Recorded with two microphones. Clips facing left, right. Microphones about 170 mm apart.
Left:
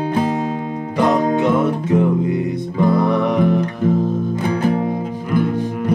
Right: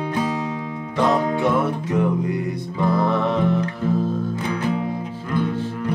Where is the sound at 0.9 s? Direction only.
20° left (ahead or behind).